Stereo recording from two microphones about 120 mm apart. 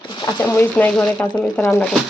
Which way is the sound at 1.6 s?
20° left (ahead or behind).